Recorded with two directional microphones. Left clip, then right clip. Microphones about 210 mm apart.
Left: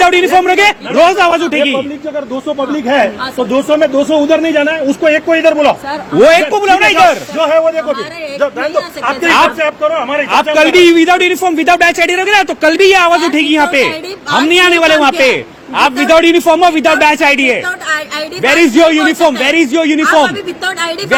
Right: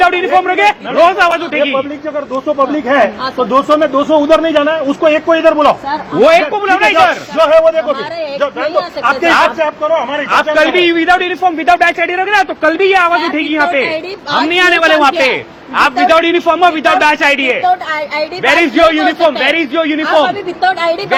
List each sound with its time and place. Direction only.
0.0 s a man's voice: 50° left (ahead or behind)
2.6 s a man's voice: 30° left (ahead or behind)
6.2 s a man's voice: 45° left (ahead or behind)
7.3 s a man's voice: 25° left (ahead or behind)
8.4 s speech: 10° left (ahead or behind)
10.5 s a man's voice: 40° left (ahead or behind)
20.1 s a man's voice: 30° left (ahead or behind)